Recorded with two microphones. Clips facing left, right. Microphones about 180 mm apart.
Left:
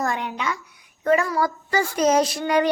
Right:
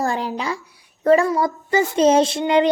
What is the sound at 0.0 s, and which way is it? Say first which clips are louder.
A child's voice: right 3 dB; 30° right (ahead or behind).